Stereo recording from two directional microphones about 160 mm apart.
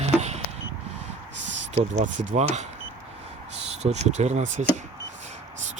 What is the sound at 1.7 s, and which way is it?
Speech, 50° right (ahead or behind).